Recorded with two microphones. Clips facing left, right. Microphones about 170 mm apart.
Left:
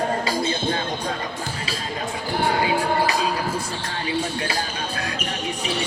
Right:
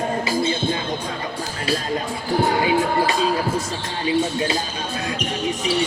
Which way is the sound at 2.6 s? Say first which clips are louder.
Right 2 dB; 25° right (ahead or behind).